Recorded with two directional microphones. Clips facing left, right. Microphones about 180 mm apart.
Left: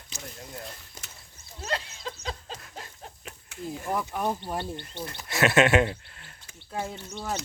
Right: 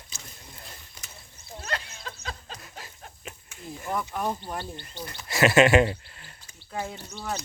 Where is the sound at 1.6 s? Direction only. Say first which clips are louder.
Left 3 dB; 30° left (ahead or behind).